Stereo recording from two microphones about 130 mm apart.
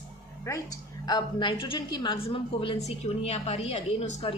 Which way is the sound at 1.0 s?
35° left (ahead or behind).